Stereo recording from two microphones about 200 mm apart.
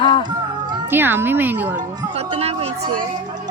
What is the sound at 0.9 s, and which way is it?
Speech, 10° right (ahead or behind).